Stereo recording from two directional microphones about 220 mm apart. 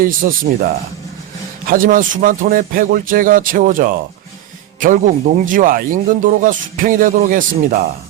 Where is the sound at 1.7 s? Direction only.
40° right (ahead or behind).